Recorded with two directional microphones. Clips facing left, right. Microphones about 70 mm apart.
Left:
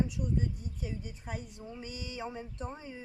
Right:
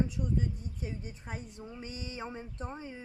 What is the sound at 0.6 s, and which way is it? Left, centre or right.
Speech, right.